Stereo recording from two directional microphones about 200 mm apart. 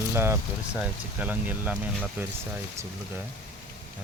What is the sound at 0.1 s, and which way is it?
Speech, 10° right (ahead or behind).